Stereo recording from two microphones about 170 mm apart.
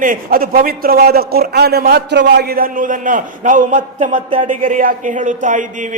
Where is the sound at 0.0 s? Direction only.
55° right (ahead or behind).